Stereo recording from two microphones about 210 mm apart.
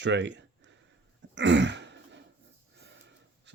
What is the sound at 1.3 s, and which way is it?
Throat clearing, 55° right (ahead or behind).